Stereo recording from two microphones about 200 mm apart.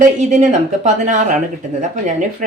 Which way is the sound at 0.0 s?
35° right (ahead or behind).